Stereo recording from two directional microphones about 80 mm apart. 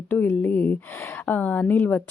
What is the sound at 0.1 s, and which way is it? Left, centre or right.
Speech, left.